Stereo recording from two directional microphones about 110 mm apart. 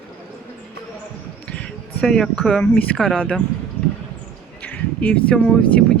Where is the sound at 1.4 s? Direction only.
10° left (ahead or behind).